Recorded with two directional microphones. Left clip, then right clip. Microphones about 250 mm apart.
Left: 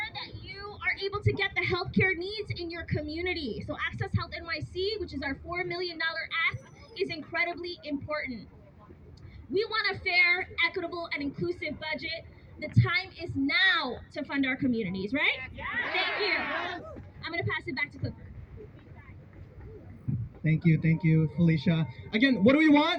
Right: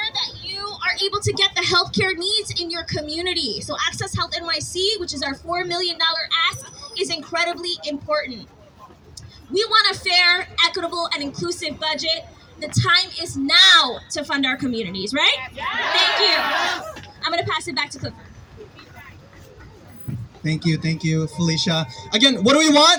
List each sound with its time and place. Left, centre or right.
0.0 s a woman's voice: centre
9.5 s a woman's voice: centre
20.4 s a woman's voice: centre